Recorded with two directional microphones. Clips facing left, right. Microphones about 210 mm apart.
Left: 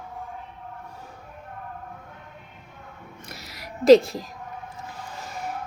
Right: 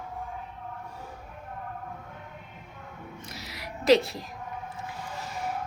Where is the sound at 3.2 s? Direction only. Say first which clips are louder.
Even; 55° left (ahead or behind).